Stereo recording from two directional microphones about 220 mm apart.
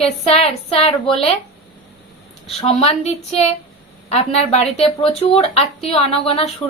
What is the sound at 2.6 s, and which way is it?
Speech, 25° left (ahead or behind).